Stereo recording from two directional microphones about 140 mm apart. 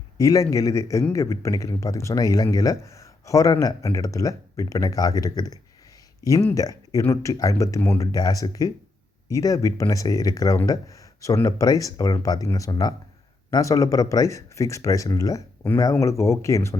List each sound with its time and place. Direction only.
0.2 s speech: 25° left (ahead or behind)